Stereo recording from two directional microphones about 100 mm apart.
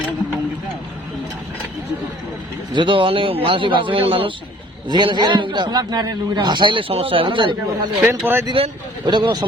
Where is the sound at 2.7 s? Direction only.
55° right (ahead or behind).